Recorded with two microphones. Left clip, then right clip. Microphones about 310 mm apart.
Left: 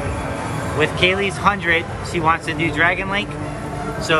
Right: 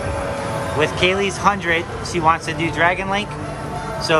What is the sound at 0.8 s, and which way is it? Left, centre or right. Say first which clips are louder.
Speech: left 1 dB; centre.